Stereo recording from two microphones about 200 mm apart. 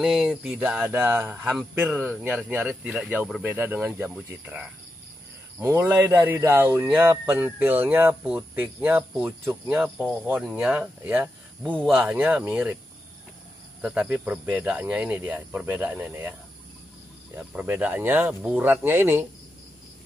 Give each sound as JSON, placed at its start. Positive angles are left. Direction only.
{"t": 0.0, "sound": "speech", "side_deg": 0}
{"t": 9.8, "sound": "speech", "side_deg": 0}
{"t": 13.7, "sound": "speech", "side_deg": -5}
{"t": 17.4, "sound": "speech", "side_deg": -5}